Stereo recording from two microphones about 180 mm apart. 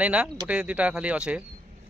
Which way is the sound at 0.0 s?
5° right (ahead or behind).